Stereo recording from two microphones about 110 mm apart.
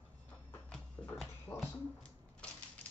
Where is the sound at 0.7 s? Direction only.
Centre (ahead or behind).